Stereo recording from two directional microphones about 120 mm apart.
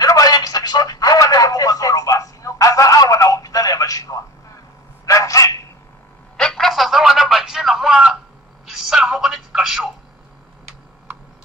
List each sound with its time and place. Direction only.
0.0 s telephone: 30° left (ahead or behind)
5.0 s dog: 25° left (ahead or behind)
6.3 s telephone: 5° left (ahead or behind)